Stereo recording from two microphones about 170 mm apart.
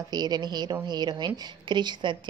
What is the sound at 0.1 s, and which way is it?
Speech, 25° right (ahead or behind).